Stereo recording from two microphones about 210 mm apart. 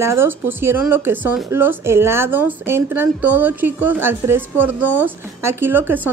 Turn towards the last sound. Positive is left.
turn(degrees=-10)  # may be behind; listen again after turning